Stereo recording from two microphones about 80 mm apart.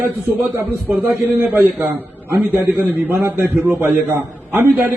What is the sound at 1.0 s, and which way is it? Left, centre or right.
A man's voice, right.